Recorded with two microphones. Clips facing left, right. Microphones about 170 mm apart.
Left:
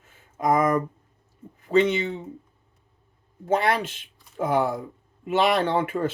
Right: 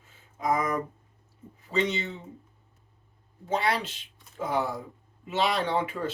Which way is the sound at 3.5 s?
50° left (ahead or behind).